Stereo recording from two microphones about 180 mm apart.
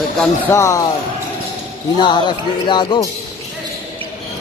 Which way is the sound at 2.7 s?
25° left (ahead or behind).